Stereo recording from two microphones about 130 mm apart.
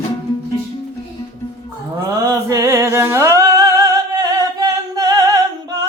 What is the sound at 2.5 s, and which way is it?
Singing, 25° right (ahead or behind).